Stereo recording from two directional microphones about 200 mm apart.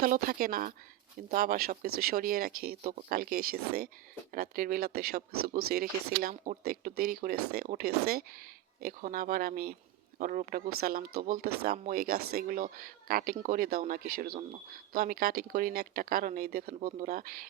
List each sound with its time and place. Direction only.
0.0 s speech: 45° right (ahead or behind)
5.3 s speech: 90° right
5.6 s speech: 50° right (ahead or behind)